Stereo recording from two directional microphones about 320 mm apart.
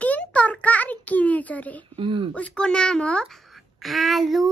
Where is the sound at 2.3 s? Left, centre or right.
Centre.